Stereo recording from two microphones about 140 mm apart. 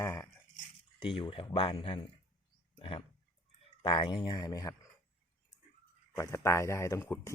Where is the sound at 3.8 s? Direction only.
35° left (ahead or behind).